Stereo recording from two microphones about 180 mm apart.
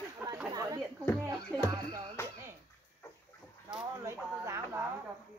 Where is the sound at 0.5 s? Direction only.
20° right (ahead or behind).